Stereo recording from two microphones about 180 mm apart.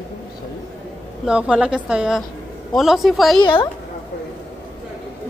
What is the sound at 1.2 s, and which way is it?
A woman's voice, 5° right (ahead or behind).